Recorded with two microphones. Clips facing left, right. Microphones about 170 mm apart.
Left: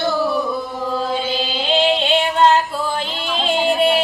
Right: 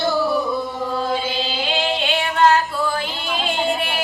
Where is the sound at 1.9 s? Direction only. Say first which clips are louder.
Left 3 dB; 20° left (ahead or behind).